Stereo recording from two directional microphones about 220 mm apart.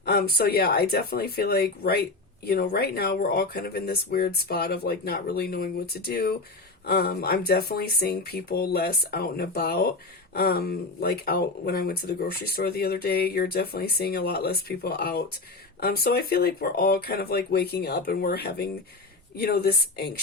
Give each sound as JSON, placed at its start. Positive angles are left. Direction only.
{"t": 0.0, "sound": "speech", "side_deg": 45}